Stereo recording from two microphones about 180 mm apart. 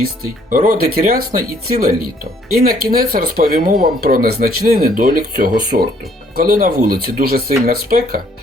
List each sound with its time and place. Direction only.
0.5 s speech: 45° right (ahead or behind)
2.5 s speech: 55° right (ahead or behind)